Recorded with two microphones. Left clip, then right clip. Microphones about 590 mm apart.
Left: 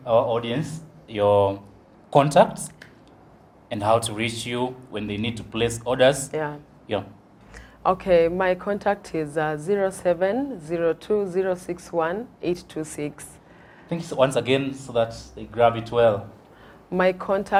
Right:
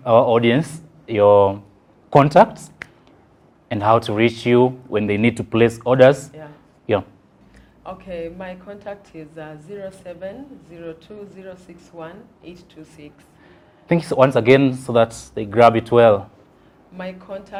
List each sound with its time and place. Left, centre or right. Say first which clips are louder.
0.0 s speech: right 7 dB; right
1.0 s speech: right 6 dB; right
3.7 s speech: right 5 dB; right
7.9 s a woman's voice: left 12 dB; left
13.9 s speech: right 6 dB; right
16.9 s a woman's voice: left 10 dB; left